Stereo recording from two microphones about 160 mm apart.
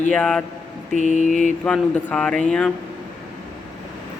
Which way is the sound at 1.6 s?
5° left (ahead or behind).